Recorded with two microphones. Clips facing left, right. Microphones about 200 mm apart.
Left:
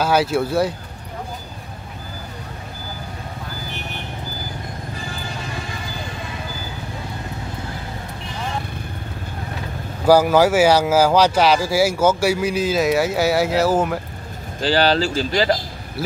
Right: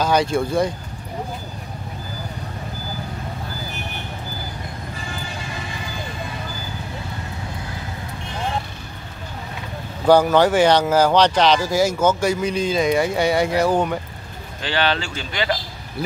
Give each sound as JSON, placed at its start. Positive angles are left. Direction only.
{"t": 0.0, "sound": "speech", "side_deg": 5}
{"t": 10.0, "sound": "speech", "side_deg": 5}
{"t": 14.6, "sound": "speech", "side_deg": 35}